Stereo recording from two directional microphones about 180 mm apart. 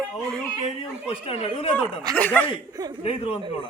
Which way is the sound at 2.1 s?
10° left (ahead or behind).